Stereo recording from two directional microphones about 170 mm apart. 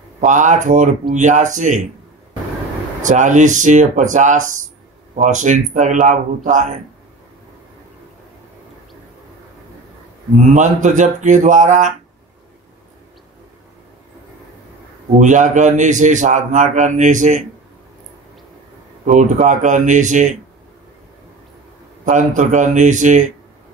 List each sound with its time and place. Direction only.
0.2 s a man's voice: 45° right (ahead or behind)
3.0 s a man's voice: 45° right (ahead or behind)
10.5 s a man's voice: 45° right (ahead or behind)
15.1 s a man's voice: 45° right (ahead or behind)
19.0 s a man's voice: 45° right (ahead or behind)
22.0 s a man's voice: 45° right (ahead or behind)